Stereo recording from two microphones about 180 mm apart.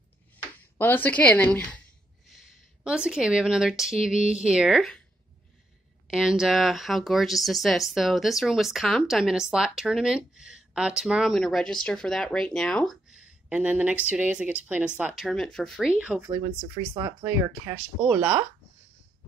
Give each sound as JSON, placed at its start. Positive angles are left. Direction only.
{"t": 0.7, "sound": "a woman's voice", "side_deg": 10}
{"t": 2.3, "sound": "speech", "side_deg": -5}
{"t": 6.0, "sound": "speech", "side_deg": -5}
{"t": 16.0, "sound": "speech", "side_deg": -10}
{"t": 16.3, "sound": "speech", "side_deg": -20}
{"t": 18.0, "sound": "speech", "side_deg": -5}